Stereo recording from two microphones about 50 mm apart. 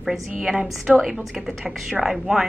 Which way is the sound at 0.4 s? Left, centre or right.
Centre.